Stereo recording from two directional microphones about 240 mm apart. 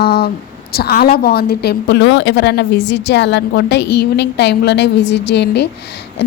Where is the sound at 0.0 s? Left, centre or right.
Left.